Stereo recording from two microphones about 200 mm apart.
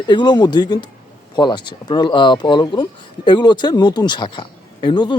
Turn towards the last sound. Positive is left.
turn(degrees=20)  # may be behind; listen again after turning